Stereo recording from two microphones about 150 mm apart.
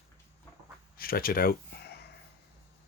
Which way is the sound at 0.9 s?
75° left (ahead or behind).